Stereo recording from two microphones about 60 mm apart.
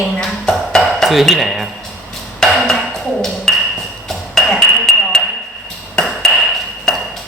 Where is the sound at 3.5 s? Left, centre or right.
Centre.